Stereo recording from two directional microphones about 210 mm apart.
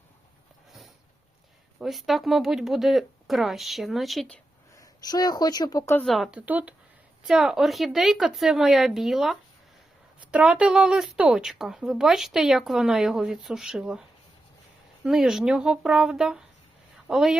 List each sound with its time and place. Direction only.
1.8 s a woman's voice: centre (ahead or behind)
4.8 s speech: 20° left (ahead or behind)
6.1 s a woman's voice: centre (ahead or behind)
15.0 s a woman's voice: centre (ahead or behind)